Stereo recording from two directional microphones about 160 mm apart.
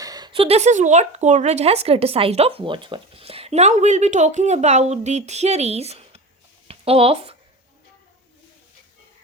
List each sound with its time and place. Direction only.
0.0 s speech: 25° right (ahead or behind)